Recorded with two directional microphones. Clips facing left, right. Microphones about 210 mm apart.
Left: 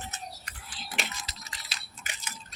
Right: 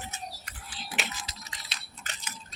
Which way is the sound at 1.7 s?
10° left (ahead or behind).